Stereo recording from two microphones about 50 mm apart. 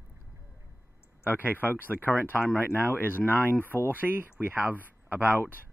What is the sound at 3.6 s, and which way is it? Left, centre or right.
Speech, left.